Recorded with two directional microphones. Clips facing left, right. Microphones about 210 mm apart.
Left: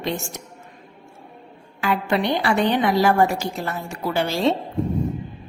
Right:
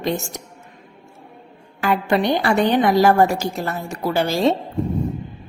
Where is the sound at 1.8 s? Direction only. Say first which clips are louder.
Right 3 dB; 40° right (ahead or behind).